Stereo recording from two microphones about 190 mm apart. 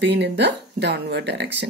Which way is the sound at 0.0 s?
65° right (ahead or behind).